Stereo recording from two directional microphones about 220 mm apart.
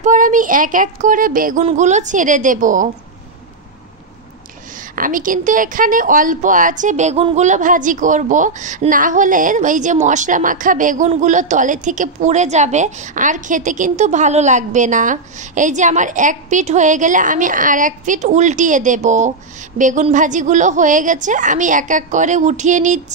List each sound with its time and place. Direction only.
0.0 s a woman's voice: 35° right (ahead or behind)
4.9 s a woman's voice: 40° right (ahead or behind)